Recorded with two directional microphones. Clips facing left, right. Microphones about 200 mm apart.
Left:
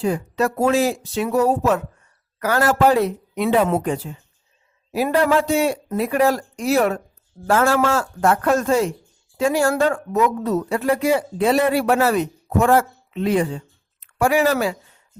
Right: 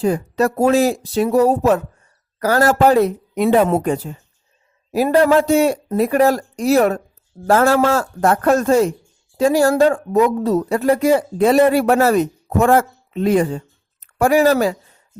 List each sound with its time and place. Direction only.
0.0 s a man's voice: 40° right (ahead or behind)